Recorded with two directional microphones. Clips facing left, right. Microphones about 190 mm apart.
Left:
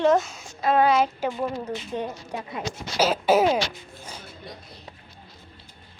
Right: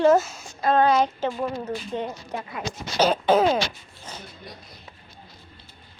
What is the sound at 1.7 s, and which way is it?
Speech, 15° left (ahead or behind).